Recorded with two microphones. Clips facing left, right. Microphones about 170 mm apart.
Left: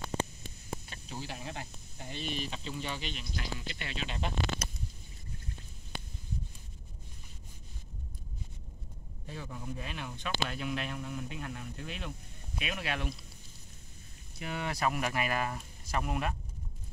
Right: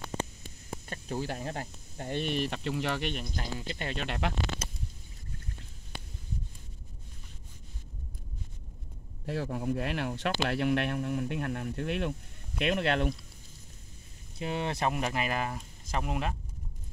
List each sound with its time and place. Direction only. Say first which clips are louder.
0.8 s speech: right 8 dB; 50° right (ahead or behind)
3.5 s speech: right 6 dB; 40° right (ahead or behind)
3.9 s speech: right 4 dB; 65° right (ahead or behind)
9.2 s speech: right 10 dB; 70° right (ahead or behind)
14.4 s speech: right 3 dB; 25° right (ahead or behind)